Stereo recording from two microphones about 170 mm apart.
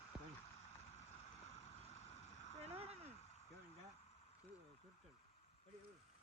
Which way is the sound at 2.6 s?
35° right (ahead or behind).